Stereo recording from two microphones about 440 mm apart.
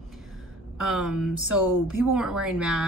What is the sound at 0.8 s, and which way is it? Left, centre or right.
A woman's voice, centre.